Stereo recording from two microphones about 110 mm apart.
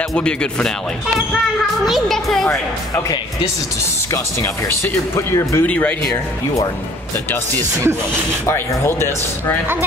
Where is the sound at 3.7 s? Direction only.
25° left (ahead or behind).